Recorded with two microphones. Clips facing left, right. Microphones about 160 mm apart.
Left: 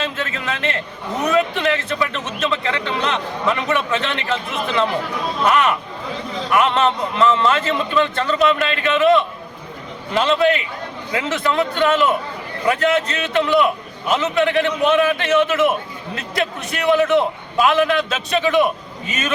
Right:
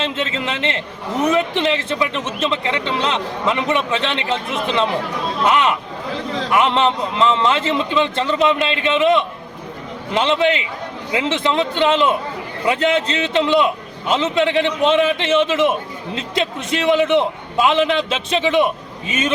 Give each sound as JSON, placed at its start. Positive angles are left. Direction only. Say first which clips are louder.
{"t": 0.0, "sound": "a man's voice", "louder": "right 3 dB", "side_deg": -25}